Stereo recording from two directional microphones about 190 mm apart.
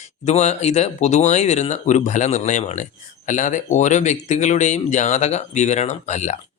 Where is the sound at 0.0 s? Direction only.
35° left (ahead or behind).